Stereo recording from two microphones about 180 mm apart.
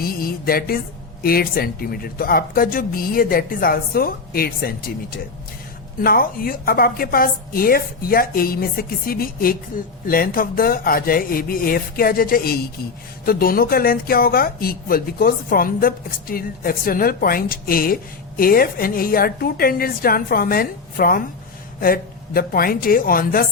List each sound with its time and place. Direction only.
0.0 s speech: 55° left (ahead or behind)
6.0 s a woman's voice: 55° left (ahead or behind)